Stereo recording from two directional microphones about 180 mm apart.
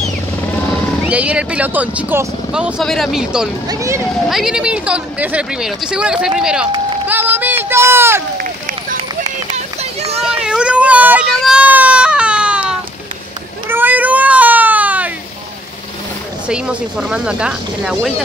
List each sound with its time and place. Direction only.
1.0 s speech: 5° right (ahead or behind)
3.6 s speech: 20° right (ahead or behind)
4.3 s speech: 5° right (ahead or behind)
10.2 s baby cry: 5° right (ahead or behind)
16.4 s speech: 5° right (ahead or behind)